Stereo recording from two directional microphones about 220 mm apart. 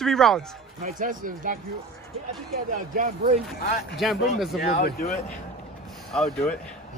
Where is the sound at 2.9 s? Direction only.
35° right (ahead or behind).